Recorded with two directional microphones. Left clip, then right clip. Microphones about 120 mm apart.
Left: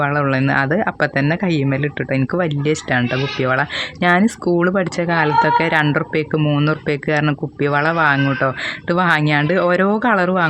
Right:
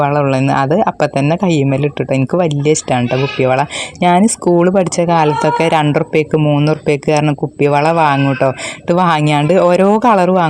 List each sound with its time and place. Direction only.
0.0 s speech: 35° right (ahead or behind)
6.3 s speech: 25° right (ahead or behind)
6.7 s speech: 40° right (ahead or behind)